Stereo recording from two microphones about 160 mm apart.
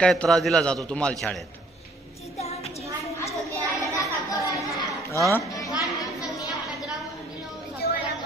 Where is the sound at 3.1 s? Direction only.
20° left (ahead or behind).